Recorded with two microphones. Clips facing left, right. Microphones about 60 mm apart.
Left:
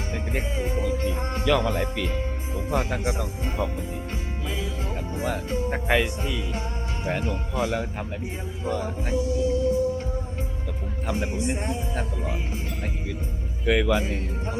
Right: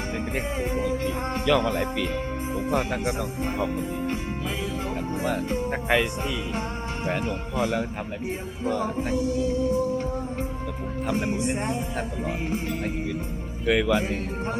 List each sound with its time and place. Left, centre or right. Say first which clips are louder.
0.8 s speech: even; centre
3.8 s speech: right 5 dB; right
5.6 s speech: left 1 dB; centre
11.0 s speech: right 2 dB; centre
13.7 s speech: even; centre